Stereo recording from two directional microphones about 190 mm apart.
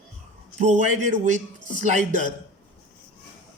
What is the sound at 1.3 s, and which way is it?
Speech, 40° right (ahead or behind).